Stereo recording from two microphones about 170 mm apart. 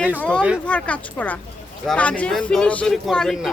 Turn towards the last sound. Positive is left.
turn(degrees=0)  # may be behind; listen again after turning